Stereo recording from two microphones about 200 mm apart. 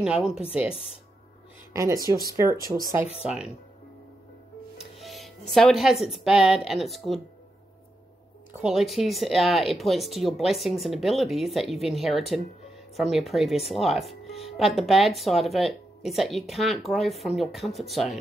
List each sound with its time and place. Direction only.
0.0 s speech: 5° right (ahead or behind)
1.7 s speech: 15° right (ahead or behind)
3.2 s speech: 5° right (ahead or behind)
5.0 s music: centre (ahead or behind)
5.5 s speech: centre (ahead or behind)
8.5 s speech: 5° right (ahead or behind)